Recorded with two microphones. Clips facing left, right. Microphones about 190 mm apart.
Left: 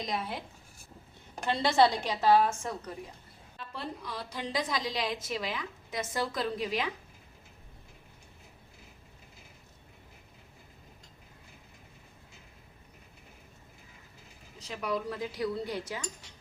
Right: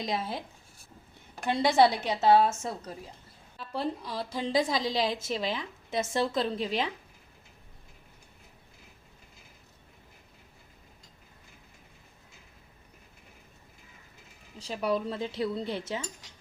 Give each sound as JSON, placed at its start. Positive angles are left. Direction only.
{"t": 1.5, "sound": "a woman's voice", "side_deg": -15}
{"t": 14.6, "sound": "a woman's voice", "side_deg": -30}